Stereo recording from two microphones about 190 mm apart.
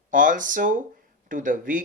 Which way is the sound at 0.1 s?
45° right (ahead or behind).